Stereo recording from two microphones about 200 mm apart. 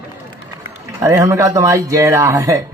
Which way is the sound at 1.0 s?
15° right (ahead or behind).